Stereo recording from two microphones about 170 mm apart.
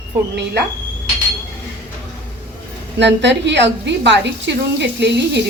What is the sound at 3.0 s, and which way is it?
A woman's voice, 90° right.